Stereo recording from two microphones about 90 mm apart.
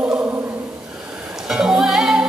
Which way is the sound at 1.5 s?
5° right (ahead or behind).